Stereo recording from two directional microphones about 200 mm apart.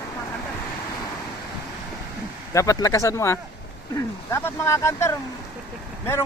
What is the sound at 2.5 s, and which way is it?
Speech, 15° left (ahead or behind).